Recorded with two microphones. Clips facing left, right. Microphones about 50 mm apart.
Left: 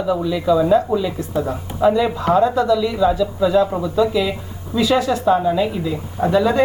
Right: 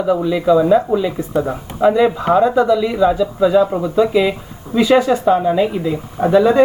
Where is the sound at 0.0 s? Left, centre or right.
Right.